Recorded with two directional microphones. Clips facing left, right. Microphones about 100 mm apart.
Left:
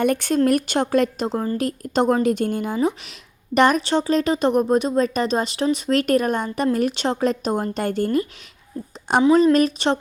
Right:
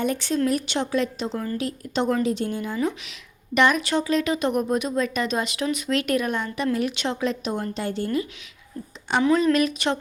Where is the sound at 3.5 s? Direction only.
40° left (ahead or behind).